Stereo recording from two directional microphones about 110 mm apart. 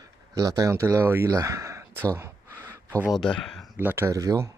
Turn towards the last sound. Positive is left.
turn(degrees=-30)  # may be behind; listen again after turning